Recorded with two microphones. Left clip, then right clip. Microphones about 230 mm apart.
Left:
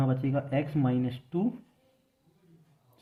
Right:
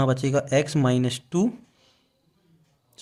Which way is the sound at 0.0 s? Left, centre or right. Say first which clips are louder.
Right 8 dB; right.